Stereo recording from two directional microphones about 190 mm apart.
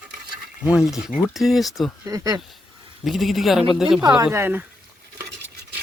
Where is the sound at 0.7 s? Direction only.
Centre (ahead or behind).